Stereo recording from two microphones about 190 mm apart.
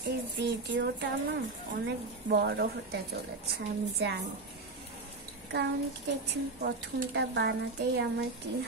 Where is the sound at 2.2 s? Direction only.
60° right (ahead or behind).